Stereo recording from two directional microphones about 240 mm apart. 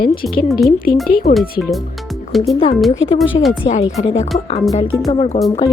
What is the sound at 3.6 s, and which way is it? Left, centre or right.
Speech, left.